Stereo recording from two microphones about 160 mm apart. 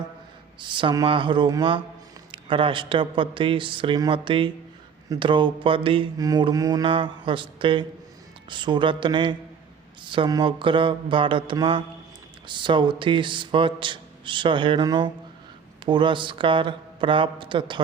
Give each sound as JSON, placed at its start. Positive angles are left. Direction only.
{"t": 0.6, "sound": "mantra", "side_deg": -30}